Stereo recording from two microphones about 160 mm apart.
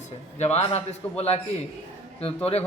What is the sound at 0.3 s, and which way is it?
A man's voice, 40° left (ahead or behind).